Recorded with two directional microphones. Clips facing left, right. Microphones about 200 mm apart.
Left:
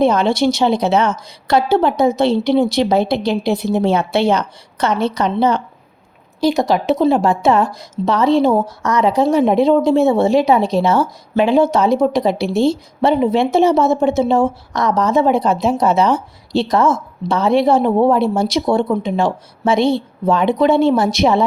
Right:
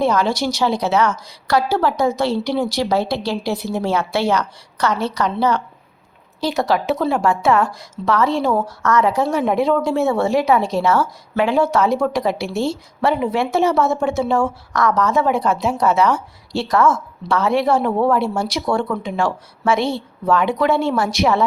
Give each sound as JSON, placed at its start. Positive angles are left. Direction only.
{"t": 0.0, "sound": "speech", "side_deg": 25}